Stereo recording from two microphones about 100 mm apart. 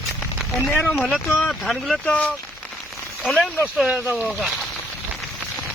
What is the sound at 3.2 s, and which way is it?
Speech, centre (ahead or behind).